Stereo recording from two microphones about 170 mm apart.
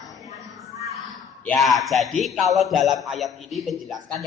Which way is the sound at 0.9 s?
Centre (ahead or behind).